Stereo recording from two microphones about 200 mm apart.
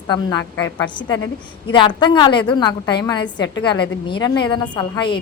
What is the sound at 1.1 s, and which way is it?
Speech, 90° left.